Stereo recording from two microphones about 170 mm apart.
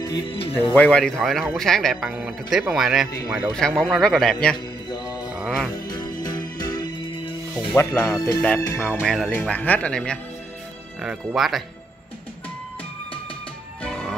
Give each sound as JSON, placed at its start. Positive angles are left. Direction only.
{"t": 0.0, "sound": "speech", "side_deg": 30}
{"t": 0.7, "sound": "speech", "side_deg": 5}
{"t": 4.8, "sound": "music", "side_deg": 25}
{"t": 7.5, "sound": "speech", "side_deg": 20}
{"t": 13.8, "sound": "music", "side_deg": 5}